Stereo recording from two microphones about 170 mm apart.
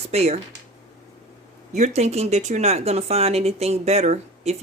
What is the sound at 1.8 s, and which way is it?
A woman's voice, 40° right (ahead or behind).